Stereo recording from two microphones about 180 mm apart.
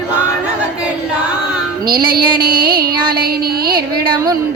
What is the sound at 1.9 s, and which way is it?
Music, 55° right (ahead or behind).